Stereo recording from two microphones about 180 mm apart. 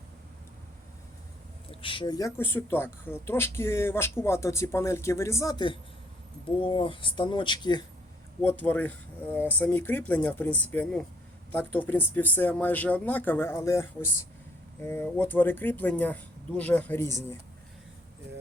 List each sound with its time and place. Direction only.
1.7 s speech: 30° left (ahead or behind)
8.4 s speech: 10° left (ahead or behind)